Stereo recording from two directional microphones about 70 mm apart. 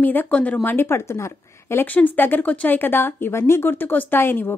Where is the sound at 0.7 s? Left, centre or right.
Left.